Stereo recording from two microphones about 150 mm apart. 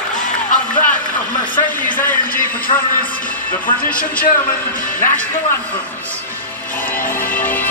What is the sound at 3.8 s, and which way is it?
Speech, 70° left (ahead or behind).